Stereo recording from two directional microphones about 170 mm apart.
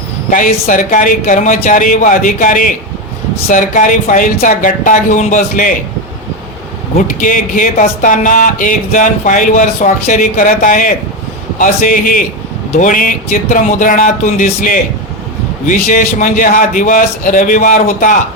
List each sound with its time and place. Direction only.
0.3 s speech: 50° left (ahead or behind)
7.2 s speech: 50° left (ahead or behind)